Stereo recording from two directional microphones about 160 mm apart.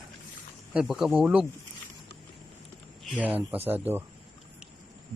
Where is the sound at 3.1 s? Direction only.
10° right (ahead or behind).